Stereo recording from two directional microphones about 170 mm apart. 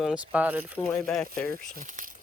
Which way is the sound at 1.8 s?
50° right (ahead or behind).